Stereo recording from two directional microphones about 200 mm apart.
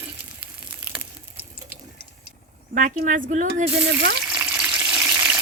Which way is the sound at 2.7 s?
40° right (ahead or behind).